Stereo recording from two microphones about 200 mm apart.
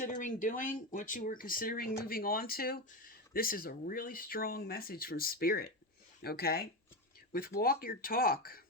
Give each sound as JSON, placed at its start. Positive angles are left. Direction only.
{"t": 0.0, "sound": "speech", "side_deg": 40}